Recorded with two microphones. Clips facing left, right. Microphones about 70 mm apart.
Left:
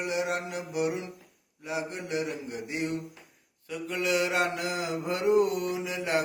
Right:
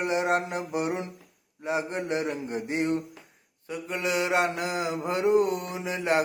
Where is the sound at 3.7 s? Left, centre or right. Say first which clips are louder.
Even; right.